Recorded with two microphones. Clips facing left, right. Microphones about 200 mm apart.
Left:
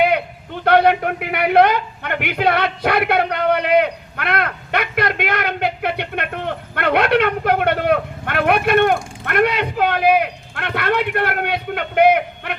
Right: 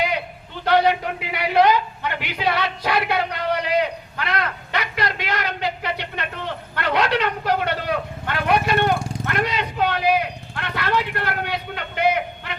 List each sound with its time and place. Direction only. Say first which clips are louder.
0.0 s a man's voice: left 7 dB; 60° left (ahead or behind)